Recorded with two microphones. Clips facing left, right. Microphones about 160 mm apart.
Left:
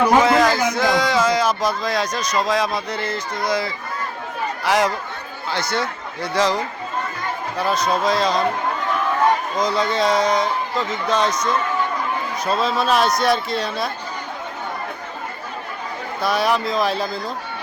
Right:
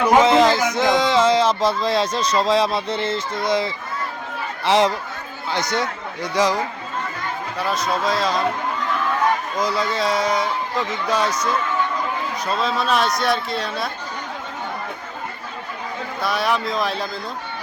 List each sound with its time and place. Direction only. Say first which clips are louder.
0.2 s a sound: right 1 dB; 25° right (ahead or behind)
0.7 s a man's voice: right 1 dB; 20° right (ahead or behind)
7.6 s a man's voice: left 3 dB; centre (ahead or behind)
9.6 s a man's voice: left 2 dB; 5° right (ahead or behind)
12.5 s a man's voice: left 2 dB; centre (ahead or behind)
16.2 s a man's voice: left 2 dB; centre (ahead or behind)